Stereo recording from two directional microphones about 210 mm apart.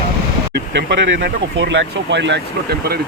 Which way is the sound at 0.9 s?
55° right (ahead or behind).